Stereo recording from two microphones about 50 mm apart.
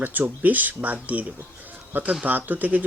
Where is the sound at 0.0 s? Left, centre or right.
Right.